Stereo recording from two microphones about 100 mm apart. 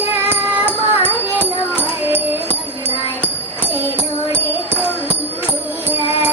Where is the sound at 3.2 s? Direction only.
20° left (ahead or behind).